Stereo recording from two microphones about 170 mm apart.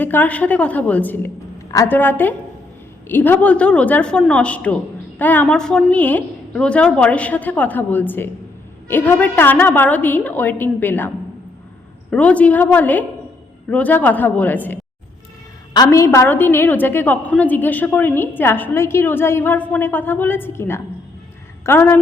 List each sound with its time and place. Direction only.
0.0 s a woman's voice: 10° left (ahead or behind)
12.1 s a woman's voice: 5° left (ahead or behind)
15.7 s a woman's voice: 20° left (ahead or behind)